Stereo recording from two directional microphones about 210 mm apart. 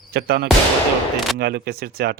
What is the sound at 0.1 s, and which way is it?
Speech, 50° right (ahead or behind).